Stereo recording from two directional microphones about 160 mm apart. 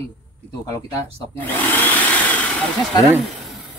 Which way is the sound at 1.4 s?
10° left (ahead or behind).